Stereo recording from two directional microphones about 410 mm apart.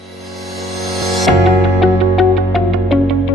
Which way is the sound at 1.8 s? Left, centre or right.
Centre.